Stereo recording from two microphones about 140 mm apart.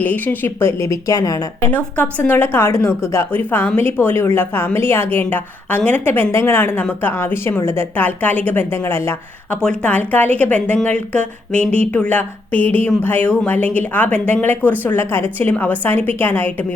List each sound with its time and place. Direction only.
0.0 s a woman's voice: 15° left (ahead or behind)
1.7 s a woman's voice: 10° left (ahead or behind)